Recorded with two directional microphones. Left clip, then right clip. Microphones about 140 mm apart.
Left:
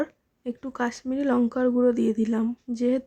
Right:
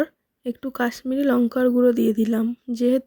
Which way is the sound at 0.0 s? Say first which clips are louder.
Right 5 dB; 35° right (ahead or behind).